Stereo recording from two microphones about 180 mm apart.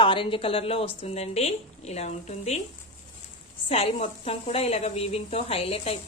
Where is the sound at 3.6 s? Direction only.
35° left (ahead or behind).